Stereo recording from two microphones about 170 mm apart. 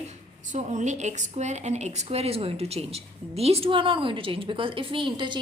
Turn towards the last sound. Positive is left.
turn(degrees=-30)  # may be behind; listen again after turning